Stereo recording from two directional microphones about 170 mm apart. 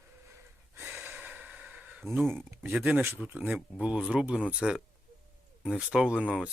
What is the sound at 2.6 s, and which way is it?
Speech, 5° right (ahead or behind).